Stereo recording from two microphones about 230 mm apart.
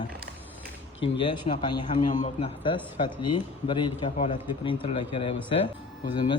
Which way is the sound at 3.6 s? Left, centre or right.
Left.